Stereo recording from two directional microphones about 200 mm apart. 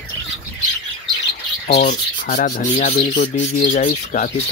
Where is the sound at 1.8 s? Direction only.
40° left (ahead or behind).